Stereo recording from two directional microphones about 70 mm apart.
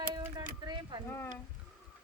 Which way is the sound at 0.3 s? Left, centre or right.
Right.